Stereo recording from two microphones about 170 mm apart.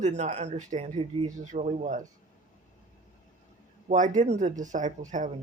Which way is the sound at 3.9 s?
45° right (ahead or behind).